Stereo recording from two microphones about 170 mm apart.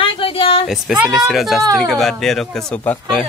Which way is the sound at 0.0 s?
30° left (ahead or behind).